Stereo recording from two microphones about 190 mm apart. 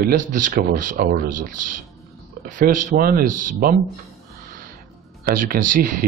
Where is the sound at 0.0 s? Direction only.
45° right (ahead or behind).